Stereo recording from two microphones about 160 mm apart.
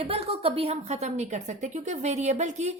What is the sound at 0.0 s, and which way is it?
A woman's voice, 35° right (ahead or behind).